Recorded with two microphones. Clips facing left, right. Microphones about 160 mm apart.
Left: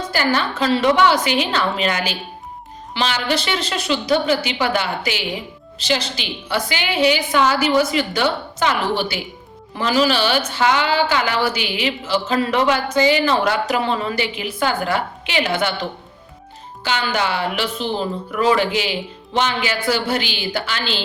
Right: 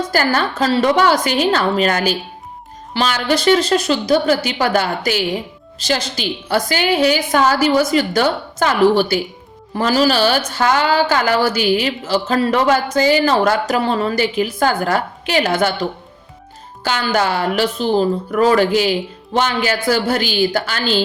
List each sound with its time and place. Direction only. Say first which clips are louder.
0.1 s a woman's voice: even; 45° right (ahead or behind)